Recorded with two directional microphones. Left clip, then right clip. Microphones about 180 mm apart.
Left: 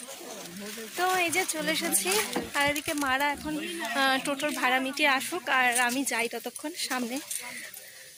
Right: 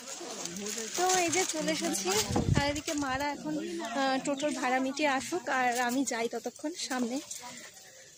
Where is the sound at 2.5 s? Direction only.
15° left (ahead or behind).